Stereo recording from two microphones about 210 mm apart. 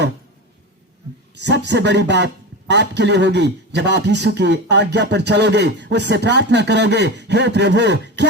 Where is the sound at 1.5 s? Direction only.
55° right (ahead or behind).